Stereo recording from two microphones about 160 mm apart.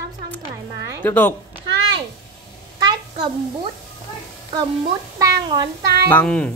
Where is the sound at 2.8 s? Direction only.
25° right (ahead or behind).